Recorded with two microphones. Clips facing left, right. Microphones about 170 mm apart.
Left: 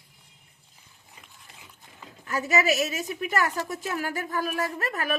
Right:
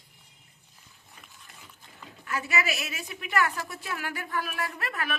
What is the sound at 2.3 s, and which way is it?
A woman's voice, 40° left (ahead or behind).